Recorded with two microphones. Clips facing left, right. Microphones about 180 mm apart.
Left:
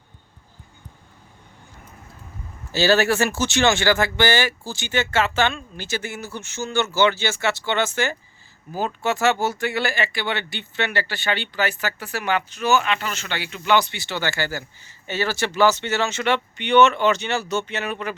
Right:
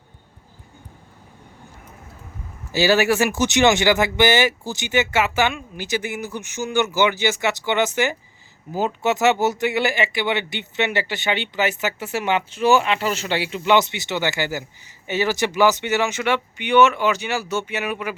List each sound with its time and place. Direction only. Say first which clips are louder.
2.7 s speech: right 1 dB; 15° right (ahead or behind)